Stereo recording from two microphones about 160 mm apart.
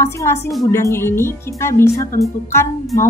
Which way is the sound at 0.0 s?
15° left (ahead or behind).